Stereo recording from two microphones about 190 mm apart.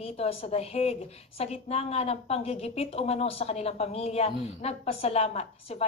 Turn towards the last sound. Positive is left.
turn(degrees=35)  # may be behind; listen again after turning